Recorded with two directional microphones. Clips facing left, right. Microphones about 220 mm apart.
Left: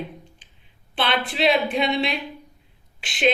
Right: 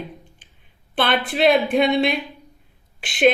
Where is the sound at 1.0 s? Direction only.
50° right (ahead or behind).